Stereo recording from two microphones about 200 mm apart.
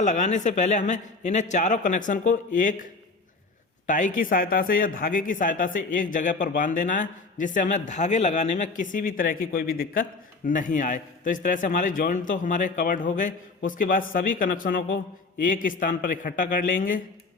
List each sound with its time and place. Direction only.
0.0 s a man's voice: 35° left (ahead or behind)
3.8 s a man's voice: 40° left (ahead or behind)